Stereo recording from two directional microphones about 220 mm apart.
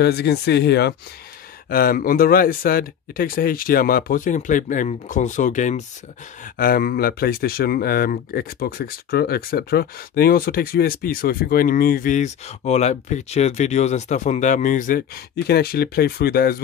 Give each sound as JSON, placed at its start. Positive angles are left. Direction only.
{"t": 0.0, "sound": "speech", "side_deg": 50}